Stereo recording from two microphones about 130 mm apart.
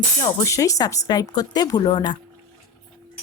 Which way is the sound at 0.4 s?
25° left (ahead or behind).